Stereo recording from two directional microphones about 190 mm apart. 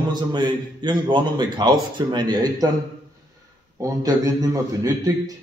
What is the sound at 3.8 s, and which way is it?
A man's voice, 20° right (ahead or behind).